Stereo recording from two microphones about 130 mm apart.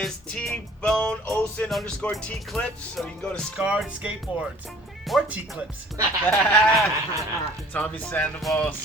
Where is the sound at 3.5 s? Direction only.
10° right (ahead or behind).